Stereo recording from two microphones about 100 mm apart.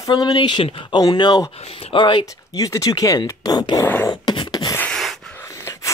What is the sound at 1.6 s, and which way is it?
Speech, 75° left (ahead or behind).